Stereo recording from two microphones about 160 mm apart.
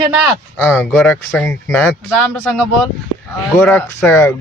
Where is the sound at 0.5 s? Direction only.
15° left (ahead or behind).